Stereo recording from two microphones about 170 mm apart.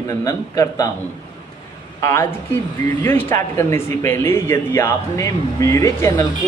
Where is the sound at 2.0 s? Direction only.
15° left (ahead or behind).